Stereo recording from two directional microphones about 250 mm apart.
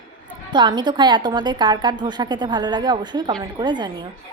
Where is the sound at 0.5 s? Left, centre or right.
Centre.